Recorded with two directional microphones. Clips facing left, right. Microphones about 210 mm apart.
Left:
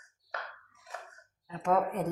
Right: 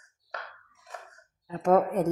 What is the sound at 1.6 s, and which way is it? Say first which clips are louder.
Speech: right 6 dB; 45° right (ahead or behind).